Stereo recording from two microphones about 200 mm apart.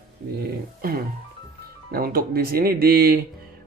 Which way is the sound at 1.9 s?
45° right (ahead or behind).